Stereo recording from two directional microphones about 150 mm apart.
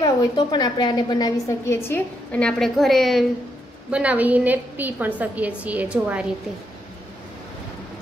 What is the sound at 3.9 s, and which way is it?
A woman's voice, 10° right (ahead or behind).